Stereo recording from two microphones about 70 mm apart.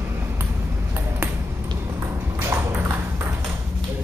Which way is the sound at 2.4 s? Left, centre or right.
Right.